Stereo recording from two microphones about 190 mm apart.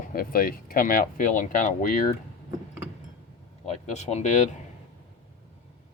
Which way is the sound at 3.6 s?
35° left (ahead or behind).